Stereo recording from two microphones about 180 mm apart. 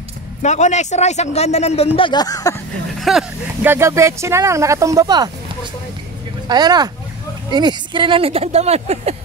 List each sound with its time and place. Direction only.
0.4 s speech: 40° left (ahead or behind)
2.0 s speech: 25° left (ahead or behind)
3.0 s speech: centre (ahead or behind); by 9.1 s 35° right (ahead or behind)